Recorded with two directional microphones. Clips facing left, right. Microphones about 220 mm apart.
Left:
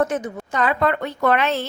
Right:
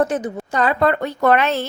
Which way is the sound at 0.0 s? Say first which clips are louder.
Right 2 dB; 35° right (ahead or behind).